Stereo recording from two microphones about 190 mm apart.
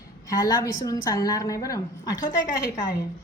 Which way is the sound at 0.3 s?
20° left (ahead or behind).